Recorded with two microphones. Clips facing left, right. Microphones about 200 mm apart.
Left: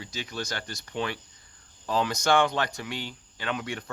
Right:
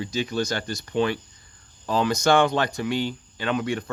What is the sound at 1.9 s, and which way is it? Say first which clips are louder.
Speech: right 4 dB; 30° right (ahead or behind).